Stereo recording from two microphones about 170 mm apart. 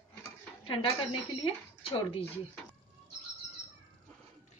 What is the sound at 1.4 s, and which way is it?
Speech, 30° left (ahead or behind).